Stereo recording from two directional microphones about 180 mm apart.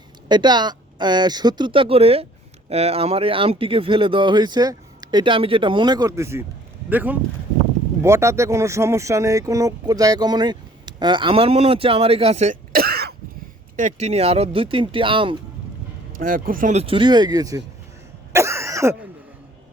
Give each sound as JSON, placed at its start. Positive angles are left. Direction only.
{"t": 0.3, "sound": "speech", "side_deg": -25}
{"t": 12.7, "sound": "throat clearing", "side_deg": -60}
{"t": 13.7, "sound": "speech", "side_deg": -40}
{"t": 16.1, "sound": "speech", "side_deg": -50}
{"t": 16.8, "sound": "speech", "side_deg": -30}
{"t": 18.3, "sound": "cough", "side_deg": -15}